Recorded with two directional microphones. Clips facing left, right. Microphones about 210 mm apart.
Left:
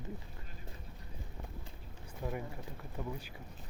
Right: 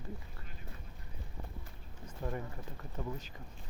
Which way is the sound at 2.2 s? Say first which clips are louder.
Even; 5° left (ahead or behind).